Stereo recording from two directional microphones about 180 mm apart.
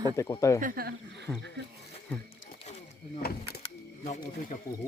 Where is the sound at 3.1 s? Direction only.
60° left (ahead or behind).